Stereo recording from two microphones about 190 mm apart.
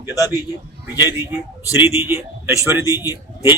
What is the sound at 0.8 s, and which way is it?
A man's voice, 10° right (ahead or behind).